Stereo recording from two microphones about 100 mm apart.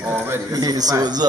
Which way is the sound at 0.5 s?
40° right (ahead or behind).